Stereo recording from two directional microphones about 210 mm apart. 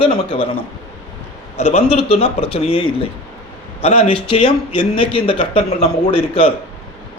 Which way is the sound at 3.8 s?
30° left (ahead or behind).